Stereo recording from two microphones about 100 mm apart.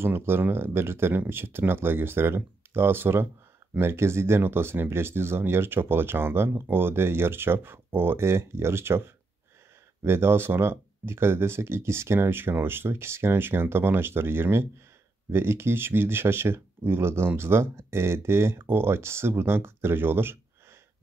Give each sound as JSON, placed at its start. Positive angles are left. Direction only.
{"t": 0.0, "sound": "speech", "side_deg": -25}